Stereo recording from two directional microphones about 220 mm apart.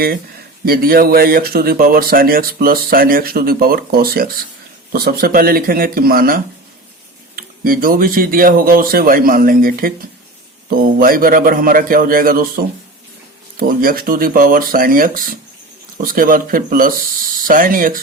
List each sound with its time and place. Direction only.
0.6 s speech: 40° right (ahead or behind)
10.9 s speech: 40° right (ahead or behind)